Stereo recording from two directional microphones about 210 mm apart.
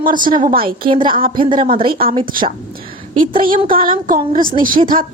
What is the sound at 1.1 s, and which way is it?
Speech, 40° right (ahead or behind).